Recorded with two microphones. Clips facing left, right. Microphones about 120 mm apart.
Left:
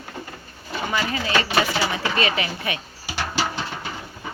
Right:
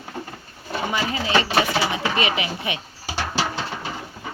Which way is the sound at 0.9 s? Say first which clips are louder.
Even; 20° right (ahead or behind).